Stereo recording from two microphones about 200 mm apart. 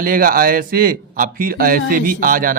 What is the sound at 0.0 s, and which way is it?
A man's voice, 45° right (ahead or behind).